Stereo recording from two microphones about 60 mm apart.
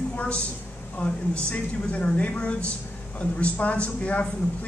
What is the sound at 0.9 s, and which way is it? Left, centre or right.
A man's voice, left.